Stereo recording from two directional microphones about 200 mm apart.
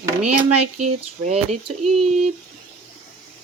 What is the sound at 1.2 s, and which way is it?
Speech, 35° right (ahead or behind).